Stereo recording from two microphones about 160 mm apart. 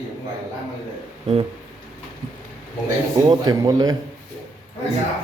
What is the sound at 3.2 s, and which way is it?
Speech, 25° right (ahead or behind).